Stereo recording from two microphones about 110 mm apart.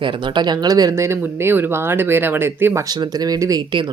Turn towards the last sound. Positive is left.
turn(degrees=-30)  # may be behind; listen again after turning